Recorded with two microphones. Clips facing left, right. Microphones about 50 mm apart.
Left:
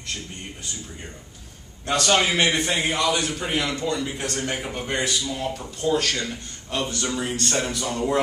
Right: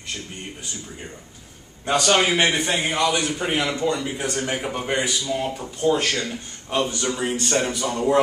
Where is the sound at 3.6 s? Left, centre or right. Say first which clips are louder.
Right 1 dB; centre.